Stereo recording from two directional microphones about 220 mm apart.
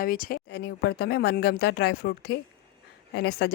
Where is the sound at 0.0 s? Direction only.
40° left (ahead or behind).